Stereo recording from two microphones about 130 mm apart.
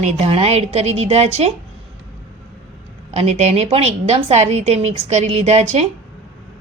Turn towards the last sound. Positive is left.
turn(degrees=-55)  # may be behind; listen again after turning